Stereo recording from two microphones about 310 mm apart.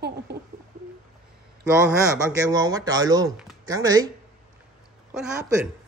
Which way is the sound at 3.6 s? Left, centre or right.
Centre.